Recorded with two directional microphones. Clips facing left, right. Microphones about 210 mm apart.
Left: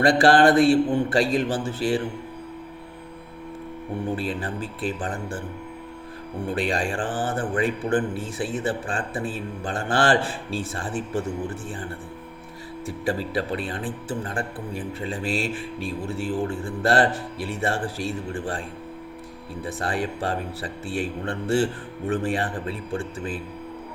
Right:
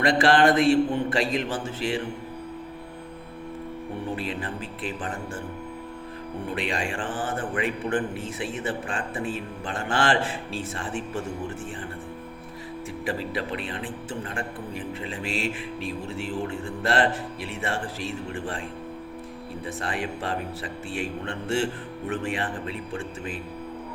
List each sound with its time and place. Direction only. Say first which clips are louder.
0.0 s a man's voice: left 3 dB; 35° left (ahead or behind)
4.1 s a man's voice: left 3 dB; 35° left (ahead or behind)
6.5 s a man's voice: left 4 dB; 35° left (ahead or behind)
13.1 s a man's voice: left 4 dB; 35° left (ahead or behind)
16.5 s a man's voice: left 4 dB; 35° left (ahead or behind)
19.6 s a man's voice: left 4 dB; 35° left (ahead or behind)